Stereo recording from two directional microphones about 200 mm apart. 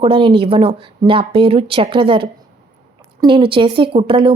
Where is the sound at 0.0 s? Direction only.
25° right (ahead or behind).